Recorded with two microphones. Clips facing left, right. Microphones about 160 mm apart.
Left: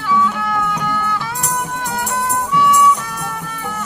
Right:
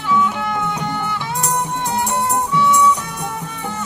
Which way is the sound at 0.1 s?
20° right (ahead or behind).